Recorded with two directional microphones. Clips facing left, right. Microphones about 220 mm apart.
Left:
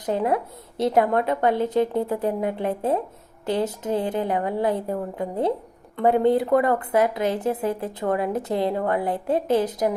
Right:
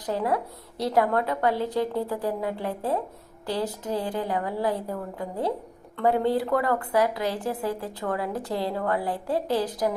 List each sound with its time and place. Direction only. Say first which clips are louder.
0.0 s speech: left 3 dB; 20° left (ahead or behind)